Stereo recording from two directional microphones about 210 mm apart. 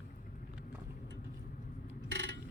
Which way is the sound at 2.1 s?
55° right (ahead or behind).